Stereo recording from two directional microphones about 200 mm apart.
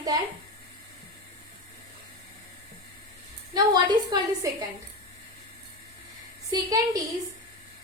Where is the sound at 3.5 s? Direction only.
20° right (ahead or behind).